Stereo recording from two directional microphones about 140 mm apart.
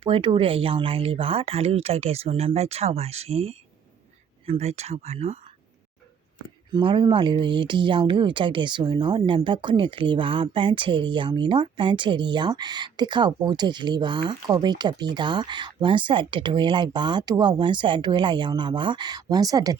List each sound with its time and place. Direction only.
0.0 s speech: 35° right (ahead or behind)
6.7 s speech: 35° right (ahead or behind)